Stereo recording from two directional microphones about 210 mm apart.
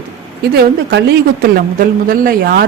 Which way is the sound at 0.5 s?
55° right (ahead or behind).